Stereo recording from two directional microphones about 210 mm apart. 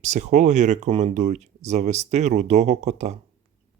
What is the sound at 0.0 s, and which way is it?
Speech, 35° right (ahead or behind).